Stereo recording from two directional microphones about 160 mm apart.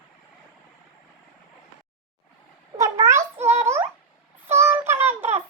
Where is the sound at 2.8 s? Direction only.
20° right (ahead or behind).